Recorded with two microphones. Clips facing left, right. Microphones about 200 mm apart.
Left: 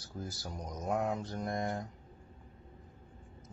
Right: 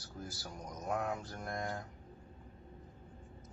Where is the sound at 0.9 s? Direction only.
15° left (ahead or behind).